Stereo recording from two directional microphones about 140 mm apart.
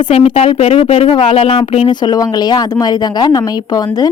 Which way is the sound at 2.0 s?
30° left (ahead or behind).